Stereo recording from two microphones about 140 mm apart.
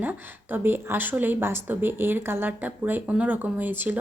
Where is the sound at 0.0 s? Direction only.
15° right (ahead or behind).